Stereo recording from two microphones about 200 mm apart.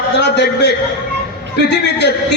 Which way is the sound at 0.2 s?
55° left (ahead or behind).